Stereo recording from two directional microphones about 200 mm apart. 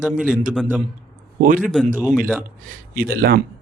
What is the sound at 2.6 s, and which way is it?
Speech, 45° right (ahead or behind).